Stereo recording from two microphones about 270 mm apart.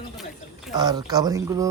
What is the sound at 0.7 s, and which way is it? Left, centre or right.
Speech, centre.